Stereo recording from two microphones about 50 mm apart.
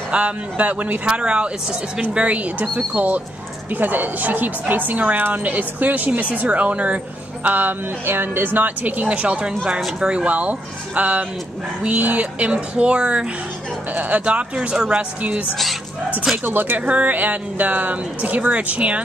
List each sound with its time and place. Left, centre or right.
0.1 s a woman's voice: right
8.0 s speech: right
8.5 s speech: right
13.9 s speech: right
16.4 s a woman's voice: right